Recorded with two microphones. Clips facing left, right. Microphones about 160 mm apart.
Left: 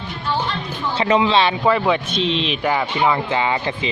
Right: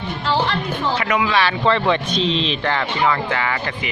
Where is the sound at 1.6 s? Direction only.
5° left (ahead or behind).